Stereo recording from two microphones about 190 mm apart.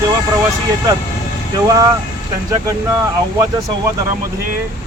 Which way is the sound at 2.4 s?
15° right (ahead or behind).